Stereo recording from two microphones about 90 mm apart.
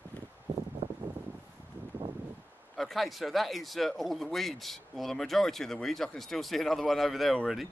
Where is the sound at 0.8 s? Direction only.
90° right.